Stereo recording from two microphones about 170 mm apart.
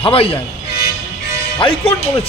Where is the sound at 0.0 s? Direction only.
35° left (ahead or behind).